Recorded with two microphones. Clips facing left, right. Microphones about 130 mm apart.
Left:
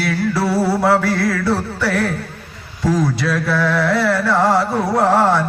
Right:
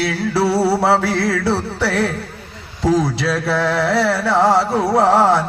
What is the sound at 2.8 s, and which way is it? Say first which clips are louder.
Carnatic music: right 1 dB; 30° right (ahead or behind).